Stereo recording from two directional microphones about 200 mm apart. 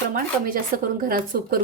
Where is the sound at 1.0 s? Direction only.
45° right (ahead or behind).